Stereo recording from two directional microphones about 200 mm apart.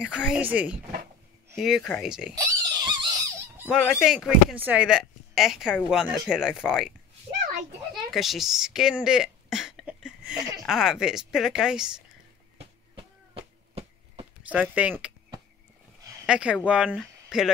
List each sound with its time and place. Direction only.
0.0 s a woman's voice: 5° right (ahead or behind)
2.3 s pig: 15° right (ahead or behind)
3.5 s a woman's voice: 5° right (ahead or behind)
7.9 s a sound: centre (ahead or behind)
10.6 s a woman's voice: centre (ahead or behind)
12.5 s a sound: 30° right (ahead or behind)
14.5 s speech: 5° right (ahead or behind)
16.0 s a sound: 15° right (ahead or behind)
16.3 s speech: 5° right (ahead or behind)